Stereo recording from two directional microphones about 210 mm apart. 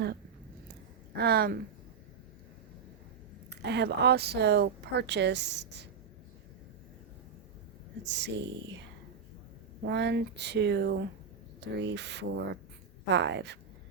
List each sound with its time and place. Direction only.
1.1 s a woman's voice: 50° right (ahead or behind)
3.6 s a woman's voice: 55° right (ahead or behind)
8.0 s speech: 55° right (ahead or behind)
9.8 s a woman's voice: 55° right (ahead or behind)